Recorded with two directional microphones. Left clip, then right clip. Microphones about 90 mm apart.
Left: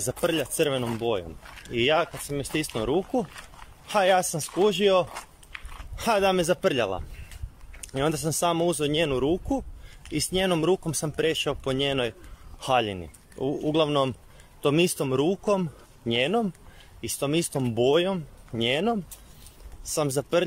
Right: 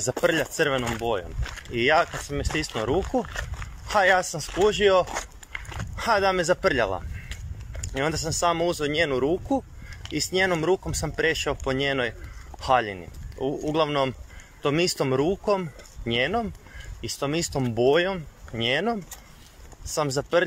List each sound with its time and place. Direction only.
0.0 s speech: 30° left (ahead or behind)